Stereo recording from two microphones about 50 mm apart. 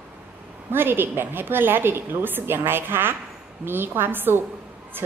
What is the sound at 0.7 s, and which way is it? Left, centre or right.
A woman's voice, right.